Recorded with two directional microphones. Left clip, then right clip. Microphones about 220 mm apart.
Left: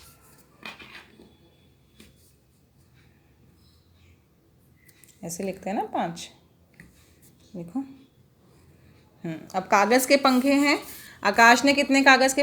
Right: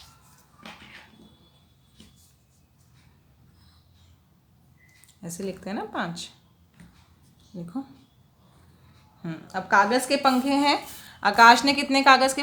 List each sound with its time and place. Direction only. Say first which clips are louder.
5.2 s a woman's voice: left 3 dB; 10° left (ahead or behind)
7.5 s a woman's voice: left 2 dB; centre (ahead or behind)
9.5 s a woman's voice: even; 20° left (ahead or behind)